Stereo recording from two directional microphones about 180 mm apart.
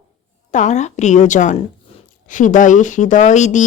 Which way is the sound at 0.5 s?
40° left (ahead or behind).